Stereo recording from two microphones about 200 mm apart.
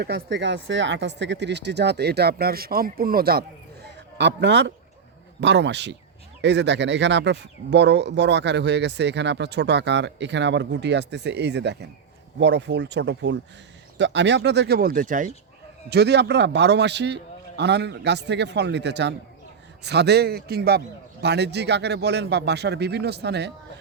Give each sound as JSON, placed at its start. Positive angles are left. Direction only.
{"t": 0.0, "sound": "speech", "side_deg": -60}
{"t": 4.2, "sound": "speech", "side_deg": -60}
{"t": 15.9, "sound": "speech", "side_deg": -55}